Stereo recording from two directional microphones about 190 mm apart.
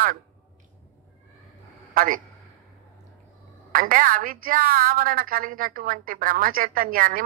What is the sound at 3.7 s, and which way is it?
A woman's voice, 45° right (ahead or behind).